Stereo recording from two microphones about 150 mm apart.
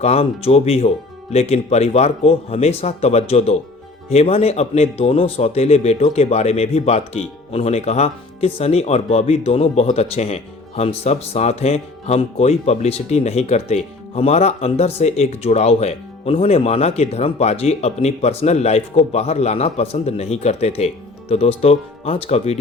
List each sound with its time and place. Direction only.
0.0 s speech: 45° left (ahead or behind)